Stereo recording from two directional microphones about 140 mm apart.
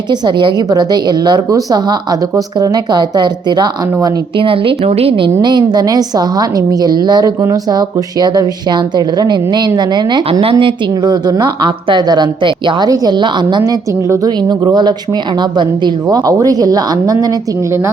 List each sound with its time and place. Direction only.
0.1 s a woman's voice: 35° right (ahead or behind)